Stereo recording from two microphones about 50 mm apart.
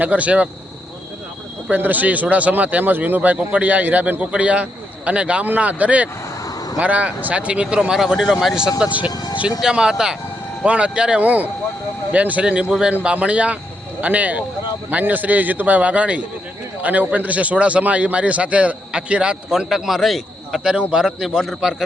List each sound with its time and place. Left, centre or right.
0.0 s a man's voice: right
1.7 s a man's voice: right; by 7.9 s centre
7.9 s a man's voice: centre
8.9 s speech: right
9.6 s a man's voice: centre
11.2 s a man's voice: right
19.5 s a man's voice: centre
20.7 s a man's voice: centre